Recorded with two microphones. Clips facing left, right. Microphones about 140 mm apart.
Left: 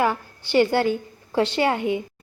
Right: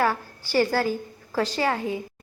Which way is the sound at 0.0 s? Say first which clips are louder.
Left 1 dB; 20° left (ahead or behind).